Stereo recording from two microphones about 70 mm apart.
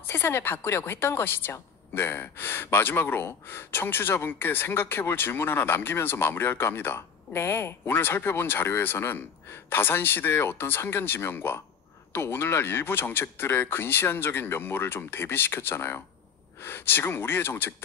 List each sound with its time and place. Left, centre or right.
0.0 s a woman's voice: left